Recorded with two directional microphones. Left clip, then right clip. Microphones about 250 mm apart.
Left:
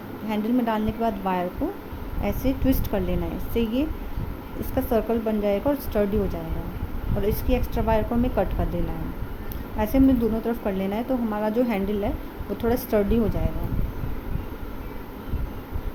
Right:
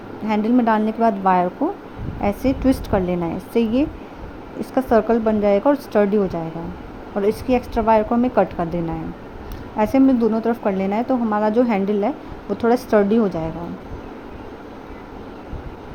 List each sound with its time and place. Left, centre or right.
0.3 s a woman's voice: centre
9.7 s a woman's voice: centre